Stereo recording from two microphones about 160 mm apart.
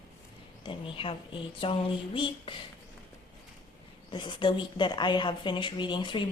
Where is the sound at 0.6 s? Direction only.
35° left (ahead or behind).